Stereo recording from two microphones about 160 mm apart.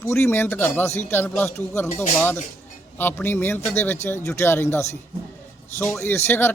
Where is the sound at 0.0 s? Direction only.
15° left (ahead or behind).